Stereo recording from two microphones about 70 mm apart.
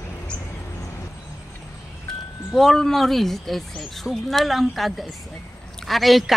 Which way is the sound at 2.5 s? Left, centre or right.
Centre.